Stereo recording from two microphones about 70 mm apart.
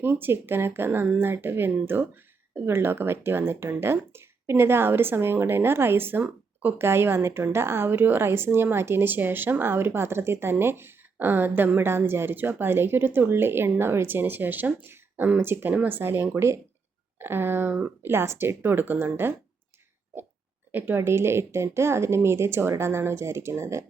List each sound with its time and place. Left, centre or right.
0.0 s a woman's voice: right
6.2 s a sound: right
6.7 s a woman's voice: right
20.7 s a woman's voice: right